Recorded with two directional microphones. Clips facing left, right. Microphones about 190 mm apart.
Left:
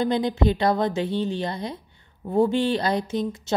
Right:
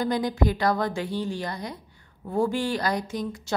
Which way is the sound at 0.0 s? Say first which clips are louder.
Left 3 dB; 25° left (ahead or behind).